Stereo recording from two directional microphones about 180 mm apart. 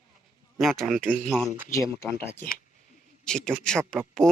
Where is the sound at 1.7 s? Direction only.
15° left (ahead or behind).